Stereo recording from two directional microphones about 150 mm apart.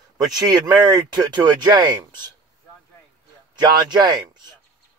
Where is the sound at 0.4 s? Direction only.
30° right (ahead or behind).